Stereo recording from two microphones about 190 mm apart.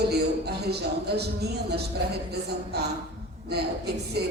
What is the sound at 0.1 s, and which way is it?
Speech, 60° right (ahead or behind).